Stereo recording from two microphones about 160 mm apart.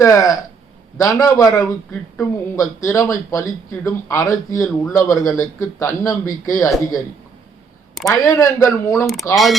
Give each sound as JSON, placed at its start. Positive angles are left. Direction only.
{"t": 0.0, "sound": "speech", "side_deg": 20}
{"t": 8.0, "sound": "speech", "side_deg": 20}
{"t": 9.3, "sound": "speech", "side_deg": 0}